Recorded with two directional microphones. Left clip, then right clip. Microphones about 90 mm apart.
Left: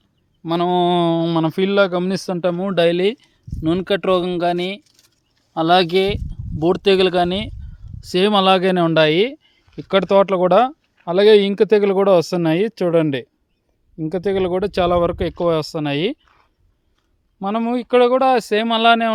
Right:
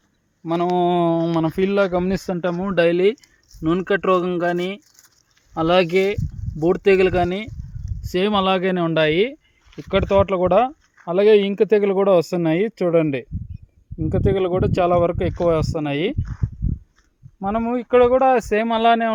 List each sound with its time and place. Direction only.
0.4 s speech: 55° left (ahead or behind)
2.2 s speech: 25° left (ahead or behind); by 9.4 s 50° left (ahead or behind)
9.7 s speech: 90° left
11.0 s speech: 60° left (ahead or behind); by 13.2 s 40° left (ahead or behind)
14.1 s speech: 20° left (ahead or behind)
14.3 s speech: 35° left (ahead or behind)
15.8 s speech: 50° left (ahead or behind)
16.2 s speech: 30° right (ahead or behind)
17.4 s speech: 45° left (ahead or behind)